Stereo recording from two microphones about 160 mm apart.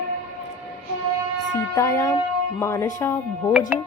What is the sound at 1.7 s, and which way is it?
Speech, 15° left (ahead or behind).